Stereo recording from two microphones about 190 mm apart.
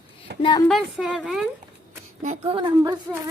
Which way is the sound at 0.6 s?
Centre (ahead or behind).